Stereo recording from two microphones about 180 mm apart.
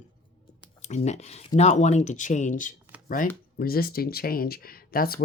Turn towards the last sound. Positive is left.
turn(degrees=55)  # may be behind; listen again after turning